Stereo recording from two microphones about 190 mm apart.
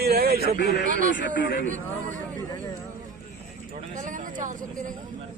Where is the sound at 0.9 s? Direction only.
45° right (ahead or behind).